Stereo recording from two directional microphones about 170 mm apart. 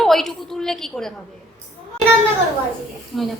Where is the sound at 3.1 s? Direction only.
Centre (ahead or behind).